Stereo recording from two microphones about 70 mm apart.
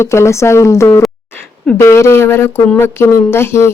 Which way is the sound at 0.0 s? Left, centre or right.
Left.